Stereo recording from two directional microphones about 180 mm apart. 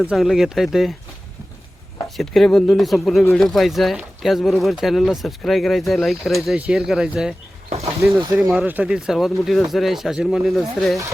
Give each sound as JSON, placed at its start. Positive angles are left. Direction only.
{"t": 0.1, "sound": "speech", "side_deg": 0}
{"t": 2.1, "sound": "speech", "side_deg": 0}
{"t": 8.0, "sound": "speech", "side_deg": -15}
{"t": 8.4, "sound": "speech", "side_deg": -5}